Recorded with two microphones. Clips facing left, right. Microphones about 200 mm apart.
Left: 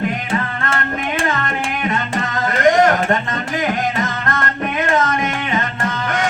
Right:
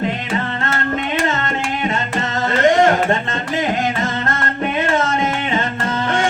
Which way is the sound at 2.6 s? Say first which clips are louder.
Even; 25° right (ahead or behind).